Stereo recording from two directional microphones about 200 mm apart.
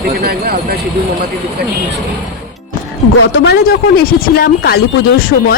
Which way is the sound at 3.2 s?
55° left (ahead or behind).